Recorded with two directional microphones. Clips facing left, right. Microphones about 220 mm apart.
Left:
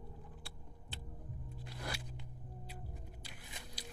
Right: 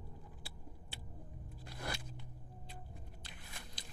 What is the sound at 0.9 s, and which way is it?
Vehicle, 10° right (ahead or behind).